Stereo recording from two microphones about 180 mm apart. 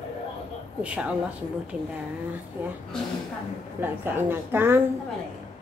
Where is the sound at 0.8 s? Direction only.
5° right (ahead or behind).